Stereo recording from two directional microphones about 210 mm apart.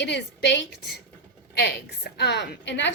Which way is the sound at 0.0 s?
55° left (ahead or behind).